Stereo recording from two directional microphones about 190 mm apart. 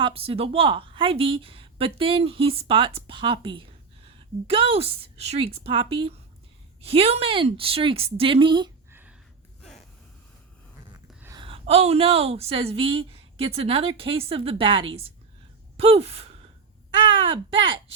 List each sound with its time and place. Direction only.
0.0 s a woman's voice: 30° right (ahead or behind)
8.9 s a sound: 10° right (ahead or behind)
11.3 s a woman's voice: 25° right (ahead or behind)
17.2 s a woman's voice: 25° right (ahead or behind)